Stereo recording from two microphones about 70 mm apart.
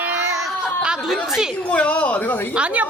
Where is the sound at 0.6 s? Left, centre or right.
Centre.